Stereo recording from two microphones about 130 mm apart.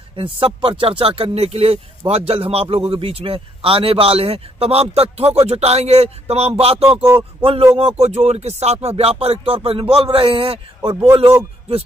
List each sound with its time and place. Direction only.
0.1 s a man's voice: 45° right (ahead or behind)